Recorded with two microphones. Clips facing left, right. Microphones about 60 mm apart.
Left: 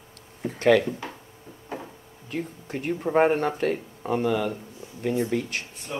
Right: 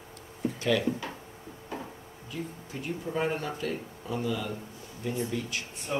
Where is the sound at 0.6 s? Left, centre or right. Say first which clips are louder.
Left 9 dB; left.